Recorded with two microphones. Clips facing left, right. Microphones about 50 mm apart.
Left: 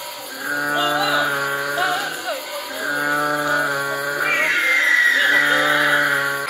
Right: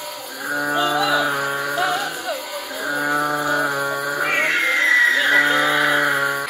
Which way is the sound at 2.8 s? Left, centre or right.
Centre.